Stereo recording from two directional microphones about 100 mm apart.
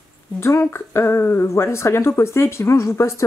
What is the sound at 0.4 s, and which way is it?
Speech, 25° left (ahead or behind).